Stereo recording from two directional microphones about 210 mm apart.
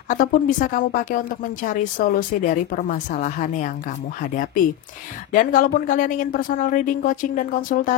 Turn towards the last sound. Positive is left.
turn(degrees=40)  # may be behind; listen again after turning